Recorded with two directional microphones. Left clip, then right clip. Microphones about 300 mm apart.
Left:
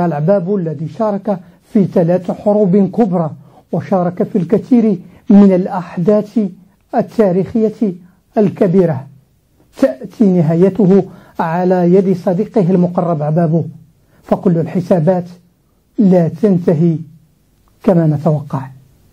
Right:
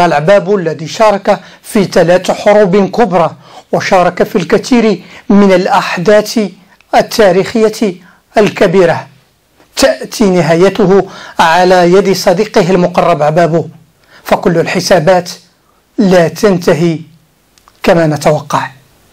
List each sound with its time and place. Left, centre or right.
0.0 s speech: centre
2.4 s speech: right
10.8 s speech: right
11.3 s speech: centre